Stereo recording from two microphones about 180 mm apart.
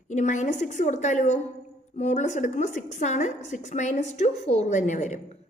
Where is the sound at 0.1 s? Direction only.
40° left (ahead or behind).